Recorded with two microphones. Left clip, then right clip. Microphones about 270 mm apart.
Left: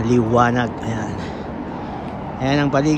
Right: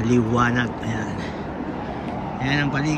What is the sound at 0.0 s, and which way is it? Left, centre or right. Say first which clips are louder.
Speech: left 4 dB; centre.